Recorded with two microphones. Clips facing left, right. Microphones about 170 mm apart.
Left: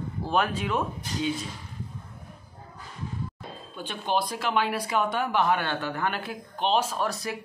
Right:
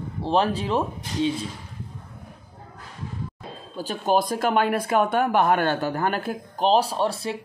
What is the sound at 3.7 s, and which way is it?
Speech, 40° right (ahead or behind).